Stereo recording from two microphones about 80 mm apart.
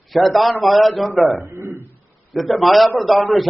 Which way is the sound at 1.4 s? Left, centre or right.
Right.